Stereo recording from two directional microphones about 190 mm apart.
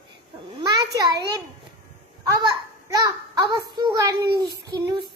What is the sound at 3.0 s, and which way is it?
A child's voice, 20° right (ahead or behind).